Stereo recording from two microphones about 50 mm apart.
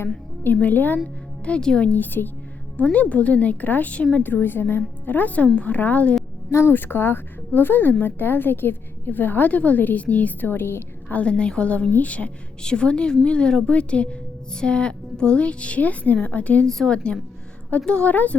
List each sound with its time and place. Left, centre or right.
0.4 s a woman's voice: left
1.5 s a woman's voice: centre
1.9 s a woman's voice: left
4.2 s a woman's voice: left
6.5 s a woman's voice: left
6.7 s a woman's voice: left
10.5 s a woman's voice: left
11.1 s a woman's voice: left
16.6 s a woman's voice: centre
18.1 s a woman's voice: left